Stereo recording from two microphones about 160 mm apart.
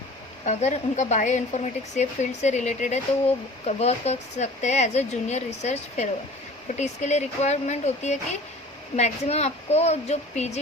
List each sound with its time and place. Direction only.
0.4 s speech: 50° left (ahead or behind)